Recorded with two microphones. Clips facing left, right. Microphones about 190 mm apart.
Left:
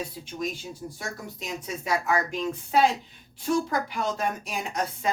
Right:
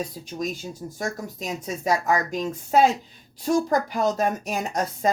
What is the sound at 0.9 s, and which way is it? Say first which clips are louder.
A woman's voice: right 6 dB; 45° right (ahead or behind).